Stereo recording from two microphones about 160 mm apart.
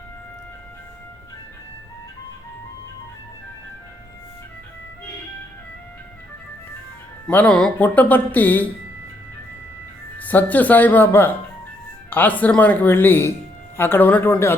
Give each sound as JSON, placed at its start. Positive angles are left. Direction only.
{"t": 7.3, "sound": "speech", "side_deg": 10}
{"t": 10.2, "sound": "speech", "side_deg": 10}